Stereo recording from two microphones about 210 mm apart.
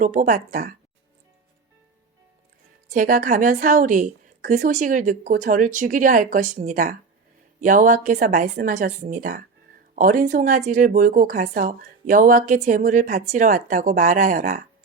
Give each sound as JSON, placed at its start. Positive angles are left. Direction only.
{"t": 0.0, "sound": "a woman's voice", "side_deg": -40}
{"t": 2.9, "sound": "a woman's voice", "side_deg": -40}